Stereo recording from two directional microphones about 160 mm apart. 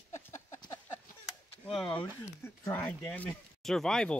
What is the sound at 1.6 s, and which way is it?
Speech, 5° left (ahead or behind).